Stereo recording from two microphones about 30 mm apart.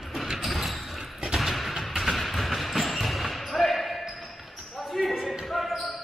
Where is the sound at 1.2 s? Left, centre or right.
Centre.